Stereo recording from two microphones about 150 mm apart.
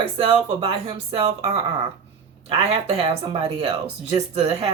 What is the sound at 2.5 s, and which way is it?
Speech, 40° right (ahead or behind).